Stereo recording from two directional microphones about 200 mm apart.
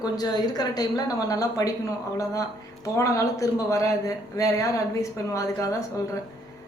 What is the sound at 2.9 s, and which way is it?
Speech, 15° left (ahead or behind).